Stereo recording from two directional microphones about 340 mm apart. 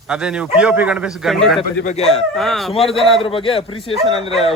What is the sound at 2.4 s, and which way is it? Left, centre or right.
Speech, centre.